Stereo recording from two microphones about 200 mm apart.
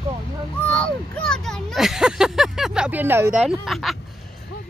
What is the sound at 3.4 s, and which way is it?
Speech, centre (ahead or behind).